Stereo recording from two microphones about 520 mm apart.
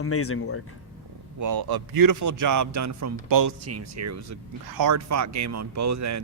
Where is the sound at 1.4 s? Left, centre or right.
Right.